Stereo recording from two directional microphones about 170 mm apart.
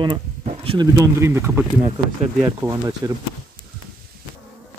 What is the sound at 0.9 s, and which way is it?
Bee, 15° right (ahead or behind).